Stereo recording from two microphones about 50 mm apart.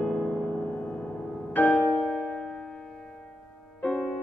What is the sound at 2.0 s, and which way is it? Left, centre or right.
Music, centre.